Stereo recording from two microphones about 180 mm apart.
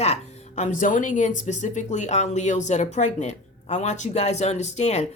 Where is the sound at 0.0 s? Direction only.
40° left (ahead or behind).